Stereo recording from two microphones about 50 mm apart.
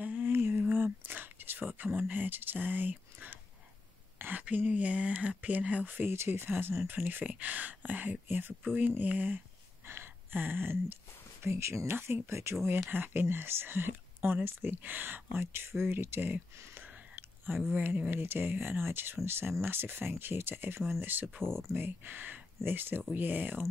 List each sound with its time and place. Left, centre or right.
0.0 s lullaby: right
0.3 s a sound: right
1.9 s speech: right
4.2 s a sound: right
4.6 s speech: right
5.9 s speech: right
6.1 s speech: right
6.9 s speech: right
9.8 s a sound: right
11.4 s speech: right
11.9 s speech: right
12.9 s speech: right
16.7 s whispering: right
18.1 s speech: right